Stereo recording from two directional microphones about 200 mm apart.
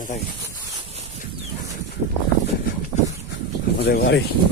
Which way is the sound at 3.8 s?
55° left (ahead or behind).